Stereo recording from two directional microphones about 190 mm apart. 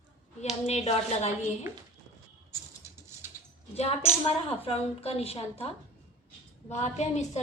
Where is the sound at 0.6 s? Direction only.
35° left (ahead or behind).